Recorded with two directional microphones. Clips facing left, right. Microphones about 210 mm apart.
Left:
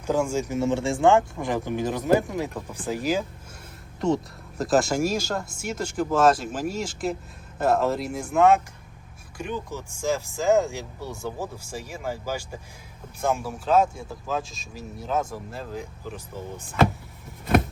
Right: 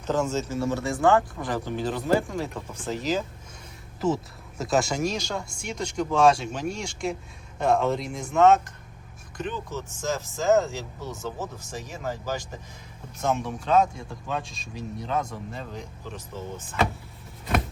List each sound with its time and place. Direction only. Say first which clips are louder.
0.0 s speech: left 2 dB; 10° left (ahead or behind)
4.0 s speech: left 2 dB; centre (ahead or behind)